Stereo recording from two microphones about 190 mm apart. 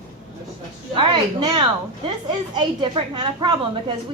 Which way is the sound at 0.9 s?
25° right (ahead or behind).